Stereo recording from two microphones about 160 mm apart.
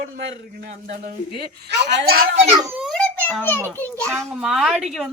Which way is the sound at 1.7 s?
90° right.